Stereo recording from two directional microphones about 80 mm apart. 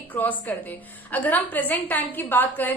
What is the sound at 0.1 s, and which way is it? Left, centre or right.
A woman's voice, left.